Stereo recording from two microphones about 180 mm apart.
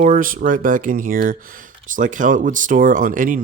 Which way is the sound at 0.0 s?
45° right (ahead or behind).